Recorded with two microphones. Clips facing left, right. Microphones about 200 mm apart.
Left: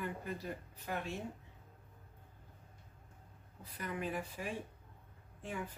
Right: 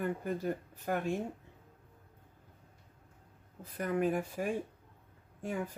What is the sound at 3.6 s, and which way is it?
Speech, 45° right (ahead or behind).